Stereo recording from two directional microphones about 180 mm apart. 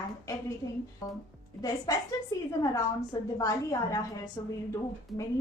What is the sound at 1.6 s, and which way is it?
A woman's voice, 20° left (ahead or behind).